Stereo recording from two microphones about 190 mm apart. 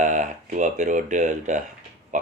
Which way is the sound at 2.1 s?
40° right (ahead or behind).